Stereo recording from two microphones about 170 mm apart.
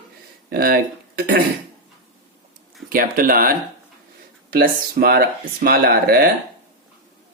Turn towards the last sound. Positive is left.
turn(degrees=-60)  # may be behind; listen again after turning